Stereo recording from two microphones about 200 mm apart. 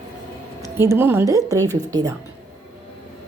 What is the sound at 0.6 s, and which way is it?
Speech, 15° right (ahead or behind).